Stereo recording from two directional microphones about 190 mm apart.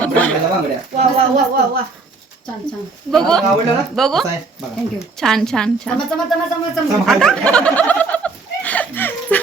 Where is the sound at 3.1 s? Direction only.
Centre (ahead or behind).